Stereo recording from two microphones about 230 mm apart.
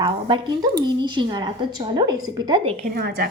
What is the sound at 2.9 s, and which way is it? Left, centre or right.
Speech, right.